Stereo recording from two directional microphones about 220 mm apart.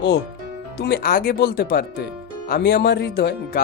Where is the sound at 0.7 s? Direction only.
45° left (ahead or behind).